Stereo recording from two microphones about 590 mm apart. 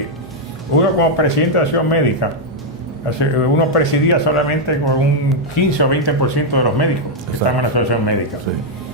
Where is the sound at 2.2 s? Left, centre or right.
Left.